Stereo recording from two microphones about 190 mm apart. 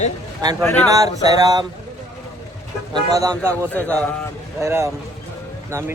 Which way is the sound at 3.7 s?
5° left (ahead or behind).